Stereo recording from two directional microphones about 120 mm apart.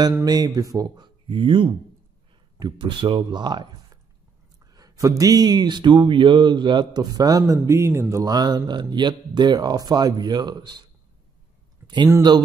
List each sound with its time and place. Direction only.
0.2 s speech: 35° right (ahead or behind)
12.2 s speech: 35° right (ahead or behind)